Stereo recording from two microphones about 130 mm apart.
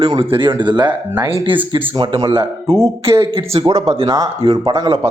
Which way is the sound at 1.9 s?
40° right (ahead or behind).